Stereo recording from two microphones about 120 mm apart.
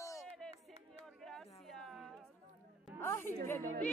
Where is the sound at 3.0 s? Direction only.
20° left (ahead or behind).